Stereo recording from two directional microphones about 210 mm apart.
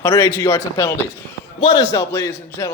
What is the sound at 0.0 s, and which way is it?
A man's voice, 15° left (ahead or behind).